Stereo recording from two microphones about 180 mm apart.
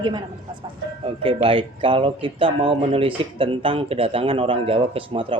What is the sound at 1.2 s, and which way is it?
A woman's voice, 30° right (ahead or behind).